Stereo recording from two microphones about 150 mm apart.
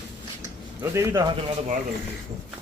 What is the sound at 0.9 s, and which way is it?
Speech, 20° right (ahead or behind).